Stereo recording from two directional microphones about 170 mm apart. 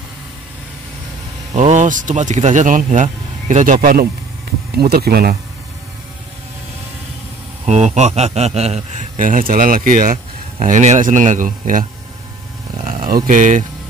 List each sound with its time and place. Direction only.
1.5 s speech: 40° right (ahead or behind); by 4.1 s 60° right (ahead or behind)
4.7 s speech: 70° right (ahead or behind)
7.6 s speech: 40° right (ahead or behind)
12.7 s a sound: 50° right (ahead or behind)